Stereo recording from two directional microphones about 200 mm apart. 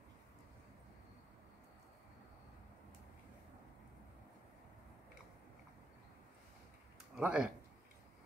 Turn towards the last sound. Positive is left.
turn(degrees=-5)  # may be behind; listen again after turning